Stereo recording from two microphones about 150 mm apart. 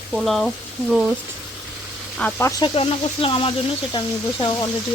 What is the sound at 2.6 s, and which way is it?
Speech, 40° left (ahead or behind).